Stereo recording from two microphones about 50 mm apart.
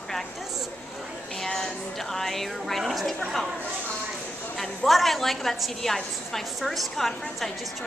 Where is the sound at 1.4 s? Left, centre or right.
Centre.